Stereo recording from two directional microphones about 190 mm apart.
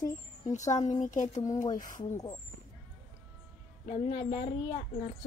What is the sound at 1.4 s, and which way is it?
Speech, 20° left (ahead or behind).